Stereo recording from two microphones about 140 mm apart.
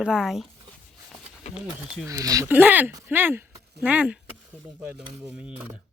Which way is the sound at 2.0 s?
25° right (ahead or behind).